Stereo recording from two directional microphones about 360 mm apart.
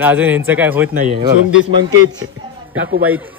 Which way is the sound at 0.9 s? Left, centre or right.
Centre.